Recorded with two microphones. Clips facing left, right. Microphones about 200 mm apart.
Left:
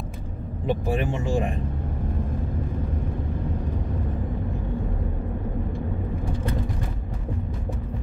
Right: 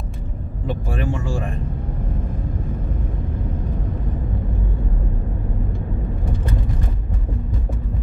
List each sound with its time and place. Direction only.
0.7 s speech: 20° left (ahead or behind)